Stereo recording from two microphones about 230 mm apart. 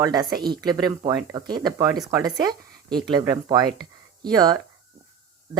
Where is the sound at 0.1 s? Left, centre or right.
Centre.